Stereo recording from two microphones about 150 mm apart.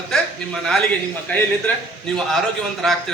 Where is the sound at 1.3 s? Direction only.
10° left (ahead or behind).